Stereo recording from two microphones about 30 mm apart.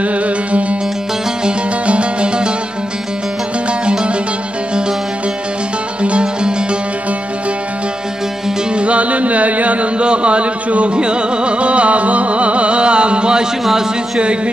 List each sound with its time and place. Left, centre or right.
0.0 s music: right
1.9 s music: right
6.0 s music: right
8.7 s music: right
9.9 s a sound: right
11.0 s music: right
13.7 s speech: centre
14.2 s a man's voice: right